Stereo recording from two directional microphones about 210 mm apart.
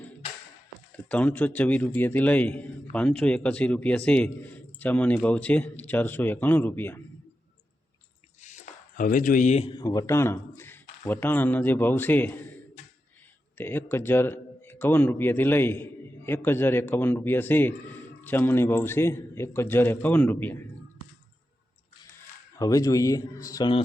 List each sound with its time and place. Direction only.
0.9 s a man's voice: 5° left (ahead or behind)
8.4 s speech: 35° left (ahead or behind); by 12.5 s 10° left (ahead or behind)
13.6 s a man's voice: 10° left (ahead or behind)
22.5 s a man's voice: 15° left (ahead or behind)